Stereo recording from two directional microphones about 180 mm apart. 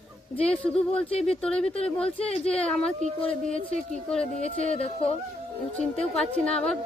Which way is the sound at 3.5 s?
45° right (ahead or behind).